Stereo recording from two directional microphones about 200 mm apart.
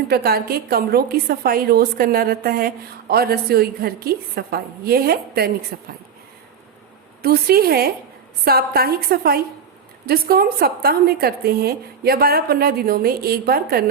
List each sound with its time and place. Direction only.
0.1 s a woman's voice: 50° right (ahead or behind)
7.2 s a woman's voice: 50° right (ahead or behind)